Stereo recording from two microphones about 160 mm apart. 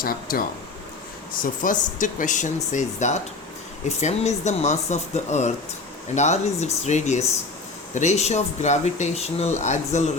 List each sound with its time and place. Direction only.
0.0 s speech: 65° left (ahead or behind); by 10.0 s 45° left (ahead or behind)